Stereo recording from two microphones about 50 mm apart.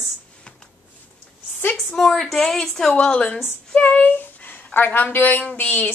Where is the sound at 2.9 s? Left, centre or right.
Left.